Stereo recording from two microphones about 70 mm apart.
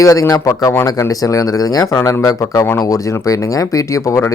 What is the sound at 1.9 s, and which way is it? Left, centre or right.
Speech, left.